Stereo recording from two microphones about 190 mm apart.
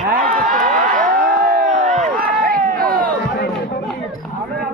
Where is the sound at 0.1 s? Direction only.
45° right (ahead or behind).